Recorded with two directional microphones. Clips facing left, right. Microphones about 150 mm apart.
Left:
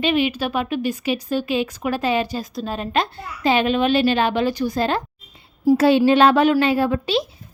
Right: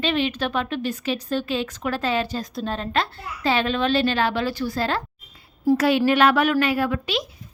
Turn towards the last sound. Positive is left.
turn(degrees=30)  # may be behind; listen again after turning